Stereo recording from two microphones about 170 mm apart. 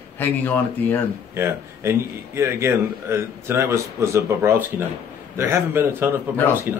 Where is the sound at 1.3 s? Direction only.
15° right (ahead or behind).